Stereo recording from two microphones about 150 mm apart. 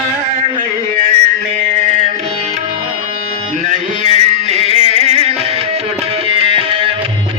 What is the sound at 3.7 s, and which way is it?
Music, 50° right (ahead or behind).